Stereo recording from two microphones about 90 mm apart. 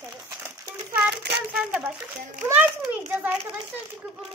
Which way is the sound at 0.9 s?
15° right (ahead or behind).